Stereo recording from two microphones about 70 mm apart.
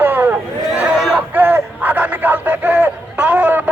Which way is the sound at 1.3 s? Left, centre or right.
Right.